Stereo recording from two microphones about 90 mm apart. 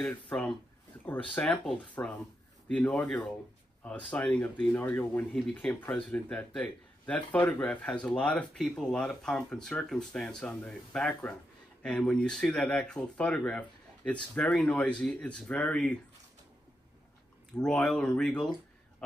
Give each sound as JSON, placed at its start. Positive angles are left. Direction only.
{"t": 0.1, "sound": "speech", "side_deg": 15}
{"t": 17.6, "sound": "speech", "side_deg": 10}